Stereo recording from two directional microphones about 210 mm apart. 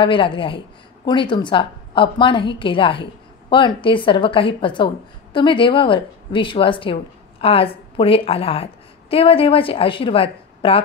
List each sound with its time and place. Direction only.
0.0 s a woman's voice: 25° left (ahead or behind)